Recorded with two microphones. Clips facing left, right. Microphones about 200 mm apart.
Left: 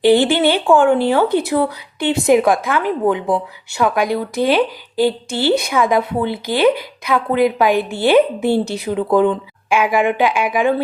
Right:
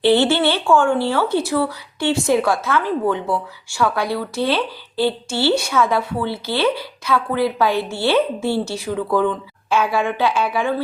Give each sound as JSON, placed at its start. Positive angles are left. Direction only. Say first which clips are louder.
{"t": 0.0, "sound": "speech", "louder": "left 3 dB", "side_deg": 15}